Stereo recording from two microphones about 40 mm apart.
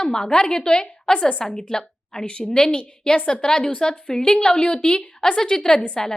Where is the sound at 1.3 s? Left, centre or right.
Left.